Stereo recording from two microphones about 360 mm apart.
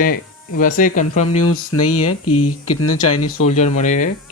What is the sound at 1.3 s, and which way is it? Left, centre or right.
Speech, left.